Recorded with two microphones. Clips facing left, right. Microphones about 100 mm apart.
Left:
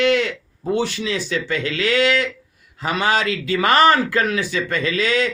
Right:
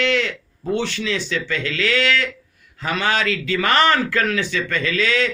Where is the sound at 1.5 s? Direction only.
25° left (ahead or behind).